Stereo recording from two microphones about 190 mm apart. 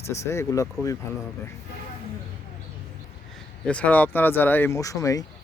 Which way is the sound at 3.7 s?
5° left (ahead or behind).